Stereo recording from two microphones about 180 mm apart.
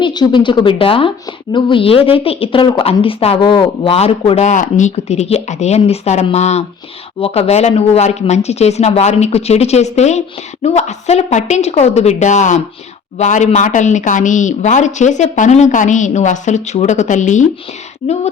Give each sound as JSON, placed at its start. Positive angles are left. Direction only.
{"t": 0.0, "sound": "a woman's voice", "side_deg": 25}